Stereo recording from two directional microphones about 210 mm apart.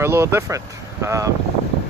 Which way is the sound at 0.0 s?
10° right (ahead or behind).